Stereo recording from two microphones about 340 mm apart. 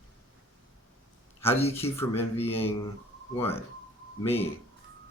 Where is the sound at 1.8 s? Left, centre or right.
Centre.